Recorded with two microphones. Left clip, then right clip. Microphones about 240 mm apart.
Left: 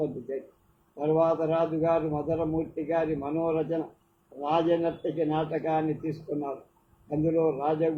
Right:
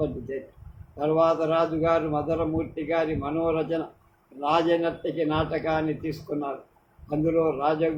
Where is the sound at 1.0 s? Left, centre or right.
Right.